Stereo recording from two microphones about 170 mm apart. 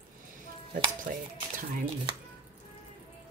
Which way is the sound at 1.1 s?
50° right (ahead or behind).